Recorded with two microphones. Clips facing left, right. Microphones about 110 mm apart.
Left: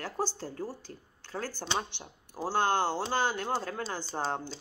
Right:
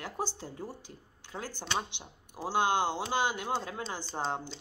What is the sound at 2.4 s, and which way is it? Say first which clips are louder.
Speech: left 1 dB; 15° right (ahead or behind).